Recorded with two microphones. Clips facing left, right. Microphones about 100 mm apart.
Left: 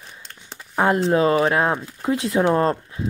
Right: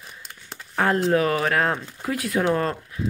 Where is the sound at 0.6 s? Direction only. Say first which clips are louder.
Left 3 dB; 20° left (ahead or behind).